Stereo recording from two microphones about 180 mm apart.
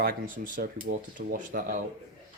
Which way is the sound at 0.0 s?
50° right (ahead or behind).